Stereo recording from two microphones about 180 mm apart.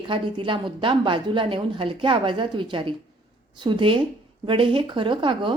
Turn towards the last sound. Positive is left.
turn(degrees=-25)  # may be behind; listen again after turning